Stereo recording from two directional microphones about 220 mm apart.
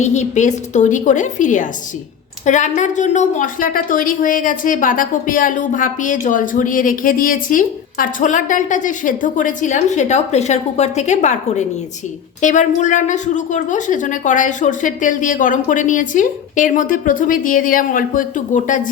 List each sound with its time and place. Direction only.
0.0 s a woman's voice: 30° left (ahead or behind)